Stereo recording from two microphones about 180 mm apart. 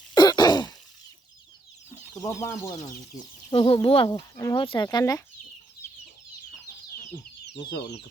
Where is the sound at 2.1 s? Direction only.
20° left (ahead or behind).